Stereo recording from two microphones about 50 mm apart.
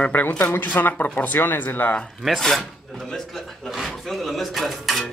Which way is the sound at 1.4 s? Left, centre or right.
Left.